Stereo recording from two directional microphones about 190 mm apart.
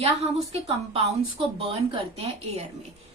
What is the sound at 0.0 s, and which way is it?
A woman's voice, 35° right (ahead or behind).